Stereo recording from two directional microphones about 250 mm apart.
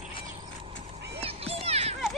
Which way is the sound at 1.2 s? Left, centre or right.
Right.